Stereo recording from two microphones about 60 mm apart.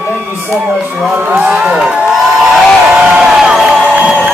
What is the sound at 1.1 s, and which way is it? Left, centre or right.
Speech, right.